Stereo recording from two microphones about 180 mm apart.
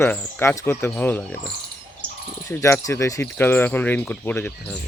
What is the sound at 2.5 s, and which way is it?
Speech, 15° left (ahead or behind).